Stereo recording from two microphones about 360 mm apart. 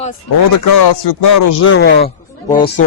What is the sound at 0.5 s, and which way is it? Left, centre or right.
Speech, left.